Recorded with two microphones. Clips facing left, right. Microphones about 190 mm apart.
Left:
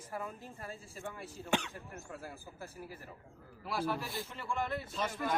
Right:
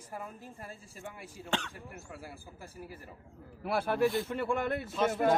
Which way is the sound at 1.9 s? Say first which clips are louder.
Left 2 dB; 10° right (ahead or behind).